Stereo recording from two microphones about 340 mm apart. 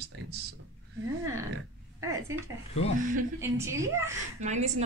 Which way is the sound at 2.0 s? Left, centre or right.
Centre.